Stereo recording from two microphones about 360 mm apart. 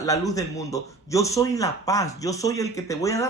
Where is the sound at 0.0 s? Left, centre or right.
Centre.